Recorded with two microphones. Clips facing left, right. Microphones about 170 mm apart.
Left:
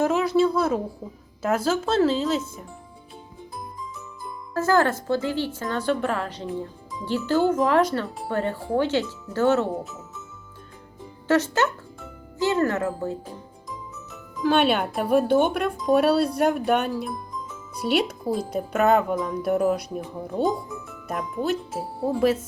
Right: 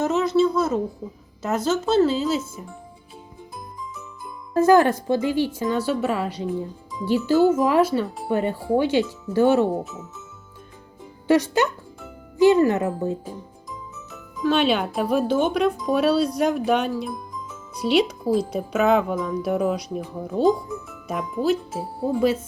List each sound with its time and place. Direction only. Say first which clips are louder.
0.0 s a woman's voice: right 1 dB; 10° left (ahead or behind)
4.5 s speech: right 5 dB; 15° right (ahead or behind)
9.8 s speech: right 2 dB; centre (ahead or behind)
11.3 s speech: right 2 dB; 15° right (ahead or behind)
13.7 s music: left 3 dB; centre (ahead or behind)
14.7 s speech: even; centre (ahead or behind)
16.6 s music: right 1 dB; centre (ahead or behind)
17.9 s speech: right 4 dB; centre (ahead or behind)